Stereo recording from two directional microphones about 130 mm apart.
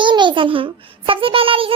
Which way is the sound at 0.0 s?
35° right (ahead or behind).